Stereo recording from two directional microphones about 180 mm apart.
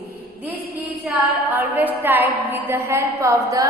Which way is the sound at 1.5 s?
10° right (ahead or behind).